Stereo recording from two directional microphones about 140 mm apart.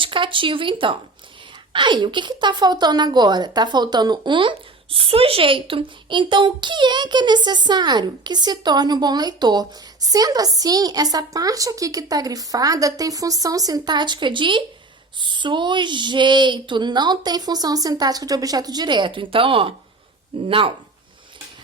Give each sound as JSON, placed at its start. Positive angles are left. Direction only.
{"t": 0.0, "sound": "a woman's voice", "side_deg": -35}